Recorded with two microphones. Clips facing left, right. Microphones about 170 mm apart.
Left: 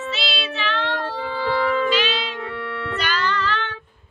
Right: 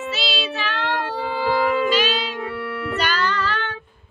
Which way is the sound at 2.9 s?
45° right (ahead or behind).